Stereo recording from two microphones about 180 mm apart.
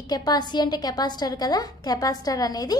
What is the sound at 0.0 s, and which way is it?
A woman's voice, 20° left (ahead or behind).